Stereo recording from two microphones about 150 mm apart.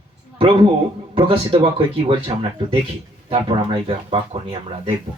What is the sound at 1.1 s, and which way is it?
Speech, 40° right (ahead or behind).